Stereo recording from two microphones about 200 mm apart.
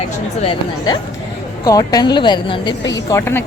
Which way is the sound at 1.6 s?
20° left (ahead or behind).